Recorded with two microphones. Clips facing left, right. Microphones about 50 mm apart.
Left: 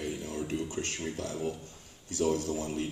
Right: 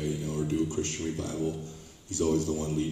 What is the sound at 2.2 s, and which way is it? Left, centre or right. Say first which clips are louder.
Speech: right 2 dB; left.